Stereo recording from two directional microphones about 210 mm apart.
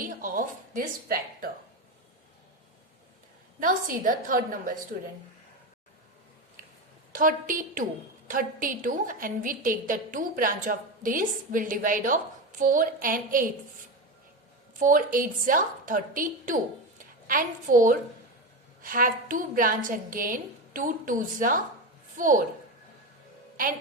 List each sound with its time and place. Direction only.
0.0 s a woman's voice: 40° right (ahead or behind)
3.6 s a woman's voice: 40° right (ahead or behind)
7.1 s a woman's voice: 40° right (ahead or behind)
14.8 s a woman's voice: 40° right (ahead or behind)